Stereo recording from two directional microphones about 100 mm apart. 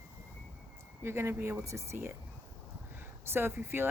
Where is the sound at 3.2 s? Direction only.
25° right (ahead or behind).